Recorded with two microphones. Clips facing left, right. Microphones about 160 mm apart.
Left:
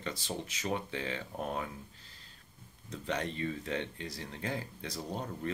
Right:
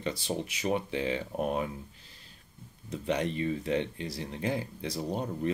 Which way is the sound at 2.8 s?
15° right (ahead or behind).